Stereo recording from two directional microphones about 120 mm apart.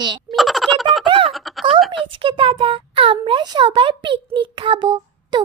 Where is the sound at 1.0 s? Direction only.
45° right (ahead or behind).